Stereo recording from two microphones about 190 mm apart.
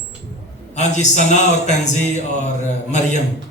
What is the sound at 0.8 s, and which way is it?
A man's voice, 40° left (ahead or behind).